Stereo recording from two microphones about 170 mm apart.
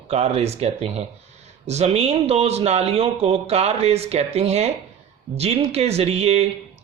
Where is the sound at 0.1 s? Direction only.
40° right (ahead or behind).